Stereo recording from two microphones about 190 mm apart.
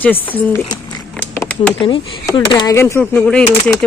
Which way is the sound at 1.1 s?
5° left (ahead or behind).